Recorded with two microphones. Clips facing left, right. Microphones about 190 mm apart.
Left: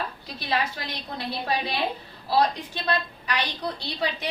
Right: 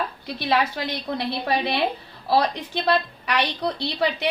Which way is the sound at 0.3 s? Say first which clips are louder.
Right 5 dB; 70° right (ahead or behind).